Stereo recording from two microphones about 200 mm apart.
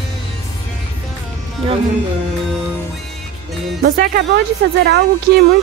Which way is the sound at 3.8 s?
50° right (ahead or behind).